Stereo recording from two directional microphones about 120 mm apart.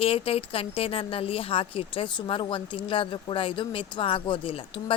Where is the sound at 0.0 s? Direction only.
50° left (ahead or behind).